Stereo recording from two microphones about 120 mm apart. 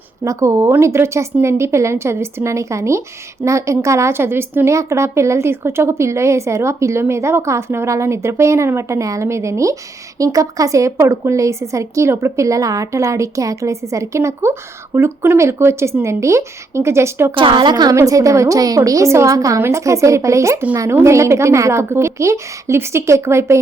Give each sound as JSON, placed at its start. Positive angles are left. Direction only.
{"t": 0.3, "sound": "a woman's voice", "side_deg": -25}
{"t": 17.3, "sound": "a woman's voice", "side_deg": -45}